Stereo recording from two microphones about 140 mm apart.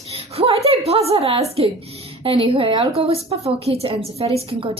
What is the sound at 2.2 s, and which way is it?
A woman's voice, 40° right (ahead or behind).